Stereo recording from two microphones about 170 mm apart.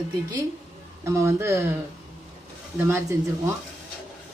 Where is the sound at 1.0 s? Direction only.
15° right (ahead or behind).